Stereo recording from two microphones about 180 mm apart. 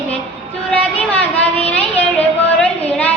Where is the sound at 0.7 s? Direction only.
10° left (ahead or behind).